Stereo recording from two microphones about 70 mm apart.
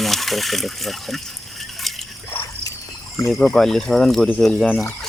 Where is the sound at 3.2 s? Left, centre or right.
Left.